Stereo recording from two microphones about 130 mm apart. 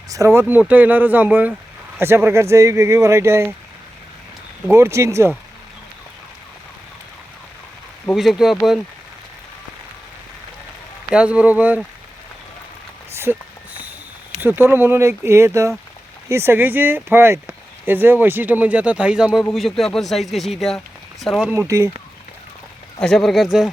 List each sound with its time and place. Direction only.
0.1 s speech: 20° right (ahead or behind)
4.7 s speech: 20° right (ahead or behind)
8.1 s speech: centre (ahead or behind)
11.1 s speech: 10° right (ahead or behind)
13.3 s speech: 15° right (ahead or behind)
14.4 s speech: 15° right (ahead or behind); by 21.5 s centre (ahead or behind)
23.0 s speech: 5° left (ahead or behind)